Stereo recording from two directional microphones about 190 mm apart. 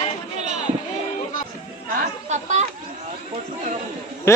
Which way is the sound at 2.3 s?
40° right (ahead or behind).